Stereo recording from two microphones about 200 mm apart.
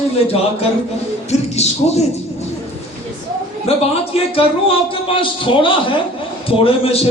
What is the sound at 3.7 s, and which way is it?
A man's voice, 30° left (ahead or behind).